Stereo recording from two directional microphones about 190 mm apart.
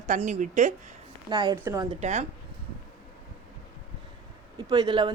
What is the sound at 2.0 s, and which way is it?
Speech, 35° right (ahead or behind).